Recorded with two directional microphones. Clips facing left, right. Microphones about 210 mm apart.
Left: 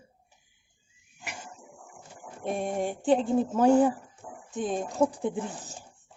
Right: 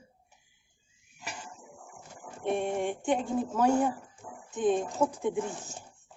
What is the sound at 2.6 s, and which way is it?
Speech, 35° left (ahead or behind).